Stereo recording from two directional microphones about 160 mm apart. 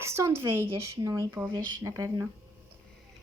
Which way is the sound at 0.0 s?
15° right (ahead or behind).